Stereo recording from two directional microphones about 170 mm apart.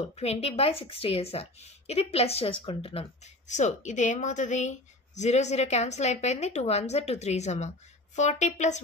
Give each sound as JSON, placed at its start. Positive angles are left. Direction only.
{"t": 0.2, "sound": "a woman's voice", "side_deg": 35}